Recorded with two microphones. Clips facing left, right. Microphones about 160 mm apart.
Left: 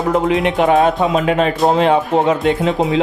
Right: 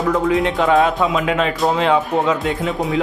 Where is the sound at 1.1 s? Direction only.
40° left (ahead or behind).